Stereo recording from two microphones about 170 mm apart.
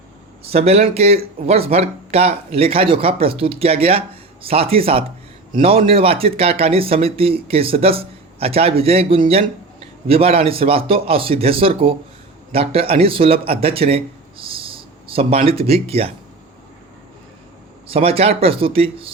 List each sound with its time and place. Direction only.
0.4 s speech: 35° right (ahead or behind)
17.8 s speech: 35° right (ahead or behind)